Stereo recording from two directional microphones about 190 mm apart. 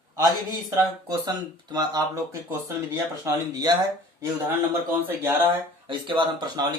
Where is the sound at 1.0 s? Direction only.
20° right (ahead or behind).